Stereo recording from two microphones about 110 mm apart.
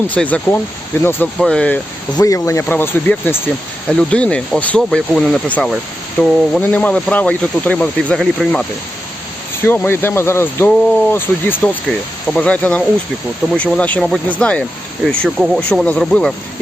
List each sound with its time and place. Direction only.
0.1 s speech: 10° left (ahead or behind)
0.9 s speech: 25° left (ahead or behind)
1.4 s speech: 10° left (ahead or behind)
2.1 s speech: 30° left (ahead or behind)
3.8 s speech: 10° left (ahead or behind)
6.6 s speech: 15° left (ahead or behind)
9.6 s speech: 20° left (ahead or behind)